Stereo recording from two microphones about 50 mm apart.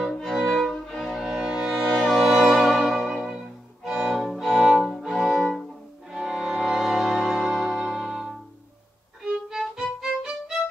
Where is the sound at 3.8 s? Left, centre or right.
Centre.